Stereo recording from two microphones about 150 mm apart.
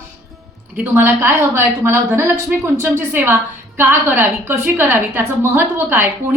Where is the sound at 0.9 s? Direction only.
15° right (ahead or behind).